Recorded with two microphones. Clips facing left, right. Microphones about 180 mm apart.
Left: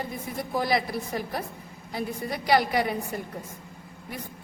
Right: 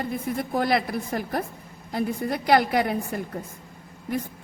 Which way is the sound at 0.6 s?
55° right (ahead or behind).